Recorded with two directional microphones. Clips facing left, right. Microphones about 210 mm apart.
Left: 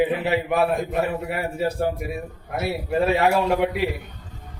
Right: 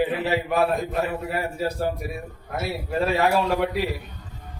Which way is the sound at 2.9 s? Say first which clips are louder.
Left 2 dB; 15° left (ahead or behind).